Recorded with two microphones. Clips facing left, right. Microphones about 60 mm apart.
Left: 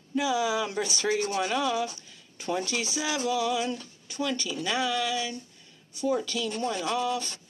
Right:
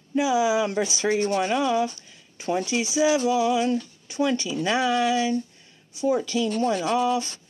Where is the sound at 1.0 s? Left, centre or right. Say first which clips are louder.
Right 4 dB; right.